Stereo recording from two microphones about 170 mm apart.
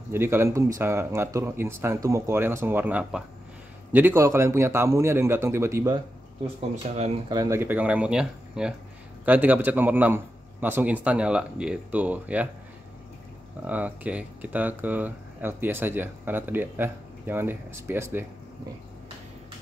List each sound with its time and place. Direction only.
0.1 s speech: 15° right (ahead or behind)
7.2 s speech: 20° right (ahead or behind)
13.7 s speech: 10° right (ahead or behind)